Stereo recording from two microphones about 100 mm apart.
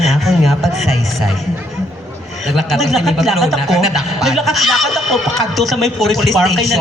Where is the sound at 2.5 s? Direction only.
Centre (ahead or behind).